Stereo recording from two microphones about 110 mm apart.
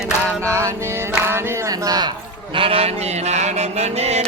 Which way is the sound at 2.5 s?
60° right (ahead or behind).